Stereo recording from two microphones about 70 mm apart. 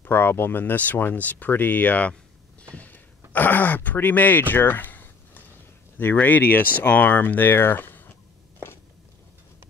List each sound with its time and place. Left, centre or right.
0.0 s speech: left